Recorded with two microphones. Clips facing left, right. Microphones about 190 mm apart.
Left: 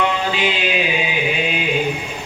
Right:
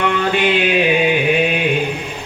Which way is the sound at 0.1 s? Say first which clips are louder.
Right 5 dB; 55° right (ahead or behind).